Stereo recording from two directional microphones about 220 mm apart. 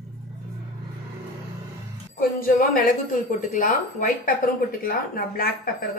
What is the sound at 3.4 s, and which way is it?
Speech, 35° left (ahead or behind).